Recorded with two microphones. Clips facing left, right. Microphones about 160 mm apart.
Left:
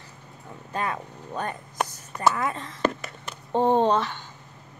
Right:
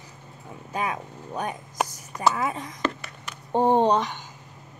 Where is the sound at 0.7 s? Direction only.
10° right (ahead or behind).